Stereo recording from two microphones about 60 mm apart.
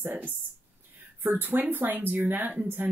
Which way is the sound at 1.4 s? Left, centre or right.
Right.